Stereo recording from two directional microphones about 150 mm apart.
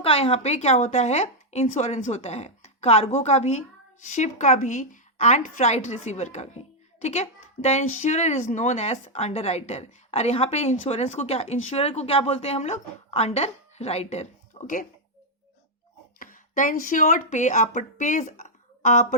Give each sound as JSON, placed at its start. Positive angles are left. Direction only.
{"t": 0.0, "sound": "speech", "side_deg": 40}
{"t": 16.1, "sound": "speech", "side_deg": 60}